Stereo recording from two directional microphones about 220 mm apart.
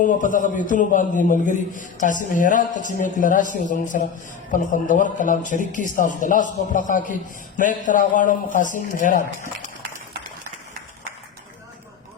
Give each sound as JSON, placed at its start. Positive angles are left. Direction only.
{"t": 0.0, "sound": "a man's voice", "side_deg": 35}